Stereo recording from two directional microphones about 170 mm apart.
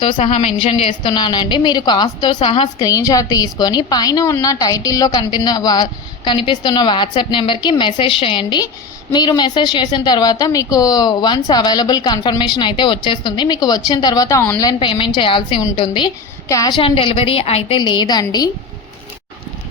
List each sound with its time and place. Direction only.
0.0 s a woman's voice: 35° left (ahead or behind)
2.7 s a woman's voice: 20° left (ahead or behind)